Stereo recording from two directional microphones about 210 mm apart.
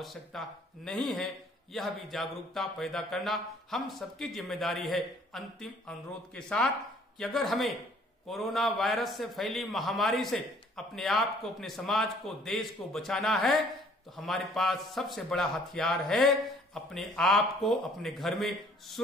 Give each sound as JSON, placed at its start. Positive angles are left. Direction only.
{"t": 0.0, "sound": "a man's voice", "side_deg": 0}